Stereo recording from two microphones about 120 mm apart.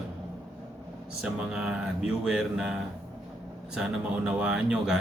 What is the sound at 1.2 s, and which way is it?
Speech, 5° right (ahead or behind).